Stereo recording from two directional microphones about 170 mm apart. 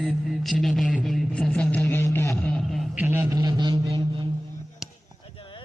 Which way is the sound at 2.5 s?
Centre (ahead or behind).